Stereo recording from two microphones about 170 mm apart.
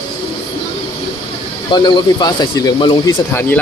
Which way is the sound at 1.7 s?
25° left (ahead or behind).